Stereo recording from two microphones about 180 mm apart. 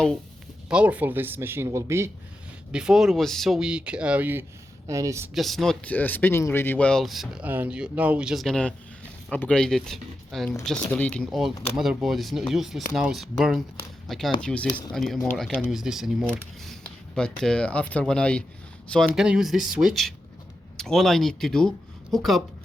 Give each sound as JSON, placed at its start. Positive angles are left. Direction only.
{"t": 0.7, "sound": "speech", "side_deg": -5}
{"t": 2.7, "sound": "speech", "side_deg": -5}
{"t": 5.3, "sound": "speech", "side_deg": 0}
{"t": 17.2, "sound": "speech", "side_deg": 5}